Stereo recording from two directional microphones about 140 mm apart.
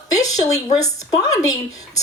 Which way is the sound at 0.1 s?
25° left (ahead or behind).